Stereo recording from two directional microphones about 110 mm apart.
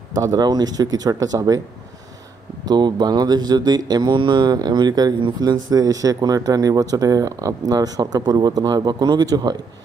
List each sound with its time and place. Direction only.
0.2 s speech: 35° right (ahead or behind)
2.6 s speech: 40° right (ahead or behind)